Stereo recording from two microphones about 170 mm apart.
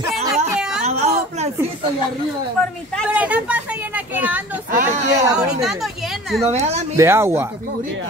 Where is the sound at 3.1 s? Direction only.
10° right (ahead or behind).